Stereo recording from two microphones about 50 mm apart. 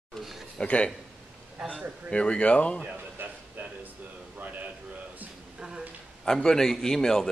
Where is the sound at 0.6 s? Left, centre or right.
Left.